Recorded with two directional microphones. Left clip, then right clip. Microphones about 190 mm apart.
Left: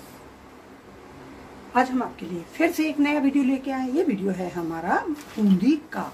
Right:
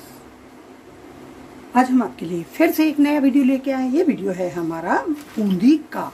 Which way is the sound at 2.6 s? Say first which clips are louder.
Right 6 dB; 30° right (ahead or behind).